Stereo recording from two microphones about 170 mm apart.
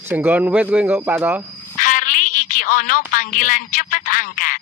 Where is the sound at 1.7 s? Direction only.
50° left (ahead or behind).